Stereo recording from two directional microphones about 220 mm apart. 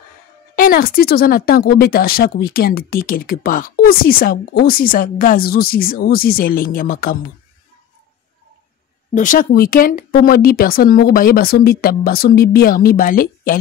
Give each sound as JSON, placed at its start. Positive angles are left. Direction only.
{"t": 0.6, "sound": "speech", "side_deg": 40}
{"t": 9.1, "sound": "speech", "side_deg": 35}